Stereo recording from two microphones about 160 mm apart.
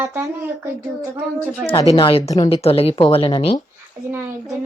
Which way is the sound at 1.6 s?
30° left (ahead or behind).